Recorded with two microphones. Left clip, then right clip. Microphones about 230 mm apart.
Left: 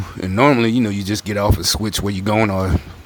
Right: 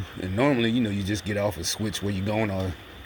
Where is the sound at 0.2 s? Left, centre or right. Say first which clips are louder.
Left 9 dB; left.